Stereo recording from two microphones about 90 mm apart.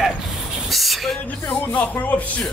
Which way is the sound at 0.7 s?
Centre (ahead or behind).